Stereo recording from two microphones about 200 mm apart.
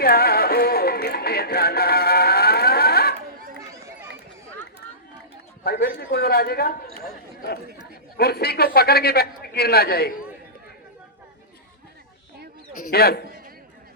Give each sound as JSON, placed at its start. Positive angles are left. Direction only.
{"t": 0.0, "sound": "music", "side_deg": 50}
{"t": 5.6, "sound": "a man's voice", "side_deg": 50}
{"t": 12.8, "sound": "a man's voice", "side_deg": 50}